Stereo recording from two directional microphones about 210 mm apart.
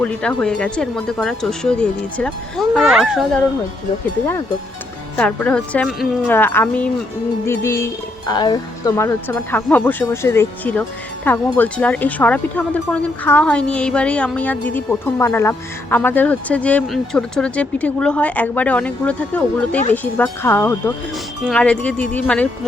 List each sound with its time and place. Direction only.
0.0 s speech: 5° left (ahead or behind)
5.1 s speech: 5° left (ahead or behind)